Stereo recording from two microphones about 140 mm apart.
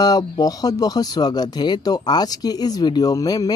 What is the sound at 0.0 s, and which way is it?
Speech, 25° left (ahead or behind).